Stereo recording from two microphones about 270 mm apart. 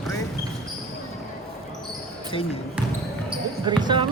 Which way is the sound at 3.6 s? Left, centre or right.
Centre.